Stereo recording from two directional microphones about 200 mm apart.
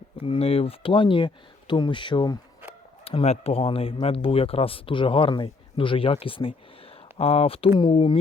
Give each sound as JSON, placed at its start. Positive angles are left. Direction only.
{"t": 0.2, "sound": "speech", "side_deg": 30}